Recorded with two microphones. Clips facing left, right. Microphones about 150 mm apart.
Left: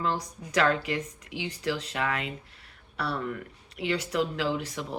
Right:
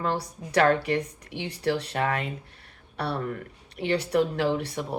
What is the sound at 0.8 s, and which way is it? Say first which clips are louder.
Speech: right 5 dB; 35° right (ahead or behind).